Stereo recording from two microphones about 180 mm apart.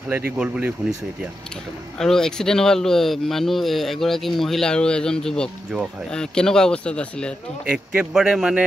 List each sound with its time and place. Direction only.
0.4 s speech: 5° right (ahead or behind)
2.0 s speech: 5° left (ahead or behind)
7.6 s speech: 5° right (ahead or behind)